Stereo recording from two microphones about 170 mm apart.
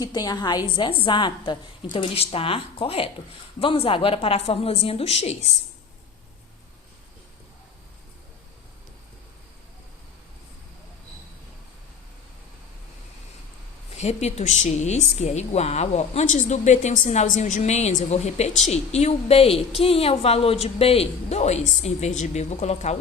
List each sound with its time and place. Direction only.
0.0 s a woman's voice: 20° left (ahead or behind); by 5.5 s 40° left (ahead or behind)
13.9 s a woman's voice: 40° left (ahead or behind)